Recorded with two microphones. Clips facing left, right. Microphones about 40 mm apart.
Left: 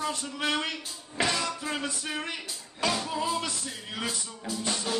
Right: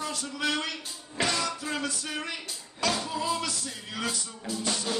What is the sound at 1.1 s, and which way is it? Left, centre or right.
Music, centre.